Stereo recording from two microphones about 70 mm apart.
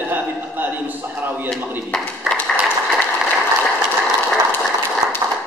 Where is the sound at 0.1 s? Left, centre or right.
Right.